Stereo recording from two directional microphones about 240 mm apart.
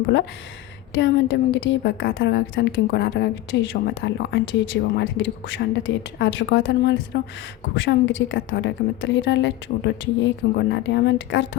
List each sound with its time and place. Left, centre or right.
0.9 s a woman's voice: left